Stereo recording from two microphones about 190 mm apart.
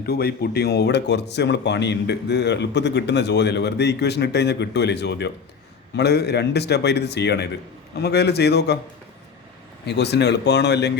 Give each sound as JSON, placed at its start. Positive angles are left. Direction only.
{"t": 0.0, "sound": "speech", "side_deg": 55}
{"t": 9.8, "sound": "speech", "side_deg": 60}